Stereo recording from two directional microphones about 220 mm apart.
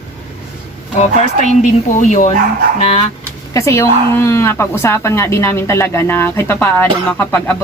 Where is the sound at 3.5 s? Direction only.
10° left (ahead or behind).